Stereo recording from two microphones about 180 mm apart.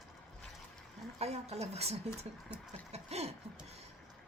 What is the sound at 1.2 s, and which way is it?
A woman's voice, 35° right (ahead or behind).